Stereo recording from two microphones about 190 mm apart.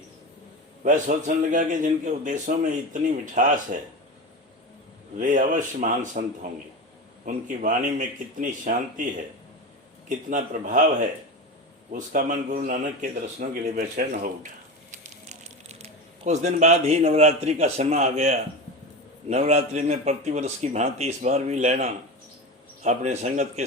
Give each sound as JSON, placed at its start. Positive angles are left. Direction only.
{"t": 0.9, "sound": "a man's voice", "side_deg": -40}
{"t": 5.2, "sound": "speech", "side_deg": -40}
{"t": 7.3, "sound": "speech", "side_deg": -45}
{"t": 10.2, "sound": "speech", "side_deg": -45}
{"t": 11.9, "sound": "speech", "side_deg": -45}
{"t": 15.0, "sound": "a man's voice", "side_deg": -35}